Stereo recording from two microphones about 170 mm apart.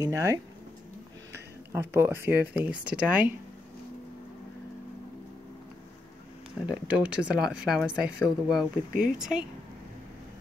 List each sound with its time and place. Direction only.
0.0 s speech: 20° right (ahead or behind)
1.7 s speech: 15° right (ahead or behind)
6.9 s speech: 5° right (ahead or behind)